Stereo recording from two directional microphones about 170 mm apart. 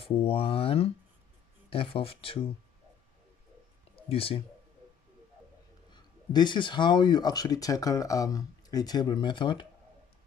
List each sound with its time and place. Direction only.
0.0 s speech: 30° left (ahead or behind)
3.9 s a sound: 35° left (ahead or behind)
5.9 s speech: 25° left (ahead or behind)